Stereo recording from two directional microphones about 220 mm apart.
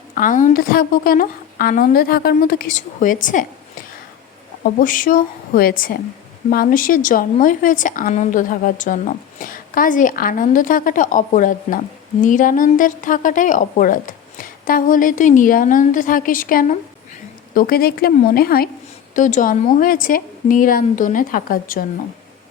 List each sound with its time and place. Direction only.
0.1 s a woman's voice: 35° left (ahead or behind)
4.6 s a woman's voice: 40° left (ahead or behind)